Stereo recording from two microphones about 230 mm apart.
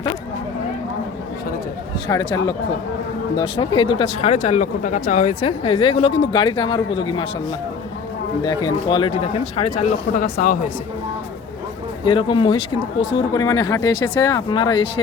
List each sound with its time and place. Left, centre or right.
2.0 s speech: centre; by 5.2 s left
5.3 s speech: left
8.4 s speech: centre; by 10.7 s left
12.0 s speech: left